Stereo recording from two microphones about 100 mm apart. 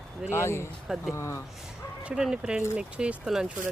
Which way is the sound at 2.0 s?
5° right (ahead or behind).